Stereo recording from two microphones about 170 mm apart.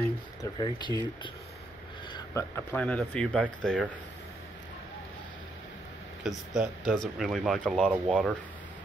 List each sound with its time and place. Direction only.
0.4 s speech: 25° left (ahead or behind)
2.1 s speech: 15° left (ahead or behind)
6.2 s speech: centre (ahead or behind)